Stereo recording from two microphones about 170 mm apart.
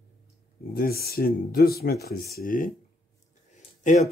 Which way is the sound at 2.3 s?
55° left (ahead or behind).